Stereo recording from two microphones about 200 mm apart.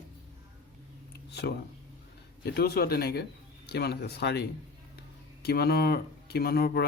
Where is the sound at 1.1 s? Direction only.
55° left (ahead or behind).